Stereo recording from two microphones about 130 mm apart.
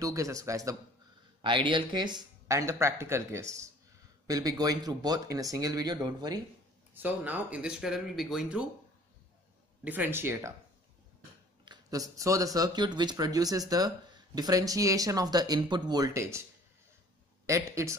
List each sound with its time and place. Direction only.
0.0 s speech: 25° right (ahead or behind)
1.4 s speech: 40° right (ahead or behind)
2.4 s speech: 25° right (ahead or behind)
6.9 s speech: 15° right (ahead or behind)
9.8 s speech: 15° right (ahead or behind)
11.6 s speech: 30° right (ahead or behind)
17.5 s speech: 20° right (ahead or behind)